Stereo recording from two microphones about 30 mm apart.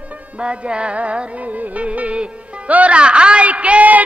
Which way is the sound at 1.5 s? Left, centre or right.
Right.